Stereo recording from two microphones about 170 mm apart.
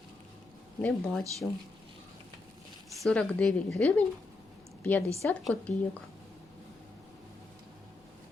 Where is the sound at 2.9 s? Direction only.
Centre (ahead or behind).